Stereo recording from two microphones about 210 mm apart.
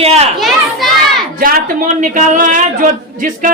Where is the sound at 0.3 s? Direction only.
Centre (ahead or behind).